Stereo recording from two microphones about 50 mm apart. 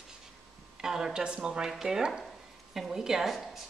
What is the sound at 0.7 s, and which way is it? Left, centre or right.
A woman's voice, centre.